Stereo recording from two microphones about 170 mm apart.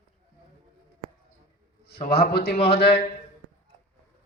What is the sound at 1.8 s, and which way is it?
A man's voice, 70° left (ahead or behind).